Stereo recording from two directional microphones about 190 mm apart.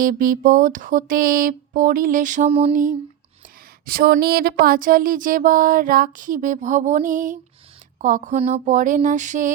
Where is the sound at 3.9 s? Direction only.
50° right (ahead or behind).